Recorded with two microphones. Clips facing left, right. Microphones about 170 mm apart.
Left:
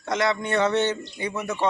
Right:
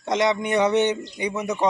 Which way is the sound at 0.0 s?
20° right (ahead or behind).